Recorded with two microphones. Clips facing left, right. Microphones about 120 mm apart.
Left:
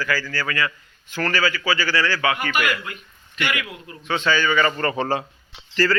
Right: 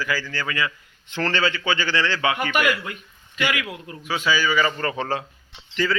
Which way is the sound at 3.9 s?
5° right (ahead or behind).